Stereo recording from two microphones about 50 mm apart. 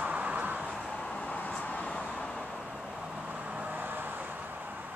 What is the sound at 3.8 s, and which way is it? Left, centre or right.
Vehicle, right.